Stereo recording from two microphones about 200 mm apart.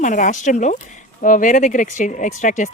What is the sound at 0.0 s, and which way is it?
A woman's voice, 40° left (ahead or behind).